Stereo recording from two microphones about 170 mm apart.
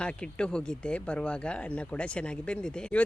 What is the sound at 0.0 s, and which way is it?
Speech, 5° left (ahead or behind).